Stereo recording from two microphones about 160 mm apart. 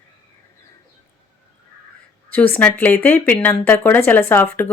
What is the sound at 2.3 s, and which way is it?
Speech, 10° left (ahead or behind).